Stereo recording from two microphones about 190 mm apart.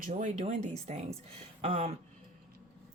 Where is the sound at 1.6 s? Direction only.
30° right (ahead or behind).